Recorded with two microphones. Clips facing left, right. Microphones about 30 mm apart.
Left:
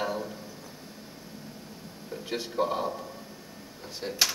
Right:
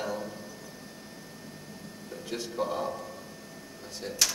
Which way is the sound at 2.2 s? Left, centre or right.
Left.